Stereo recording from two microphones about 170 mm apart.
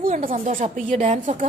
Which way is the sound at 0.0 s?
55° right (ahead or behind).